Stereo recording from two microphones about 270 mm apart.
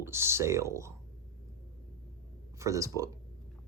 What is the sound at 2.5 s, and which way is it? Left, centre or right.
Speech, centre.